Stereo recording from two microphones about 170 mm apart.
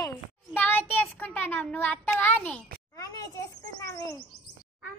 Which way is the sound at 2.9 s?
20° left (ahead or behind).